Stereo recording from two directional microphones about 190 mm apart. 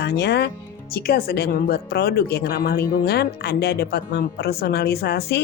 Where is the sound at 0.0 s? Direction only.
60° left (ahead or behind).